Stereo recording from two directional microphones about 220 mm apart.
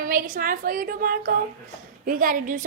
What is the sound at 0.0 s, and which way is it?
A woman's voice, 40° right (ahead or behind).